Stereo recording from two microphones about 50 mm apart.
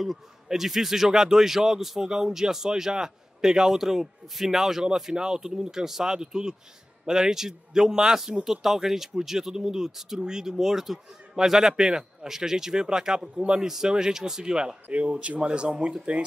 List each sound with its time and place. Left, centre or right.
0.0 s a man's voice: centre